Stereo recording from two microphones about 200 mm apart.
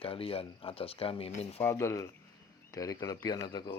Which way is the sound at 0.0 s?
30° left (ahead or behind).